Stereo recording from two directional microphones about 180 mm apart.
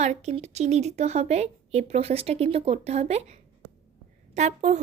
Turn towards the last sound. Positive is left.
turn(degrees=-40)  # may be behind; listen again after turning